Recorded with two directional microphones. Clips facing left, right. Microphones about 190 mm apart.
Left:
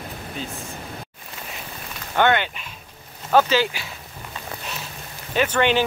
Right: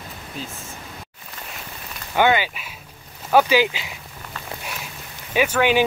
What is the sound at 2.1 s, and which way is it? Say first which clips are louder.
Speech: right 1 dB; 5° right (ahead or behind).